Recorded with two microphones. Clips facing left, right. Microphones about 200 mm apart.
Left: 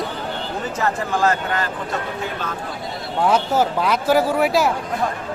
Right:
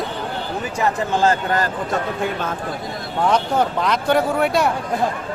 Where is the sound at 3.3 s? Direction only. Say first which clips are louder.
Even; 5° left (ahead or behind).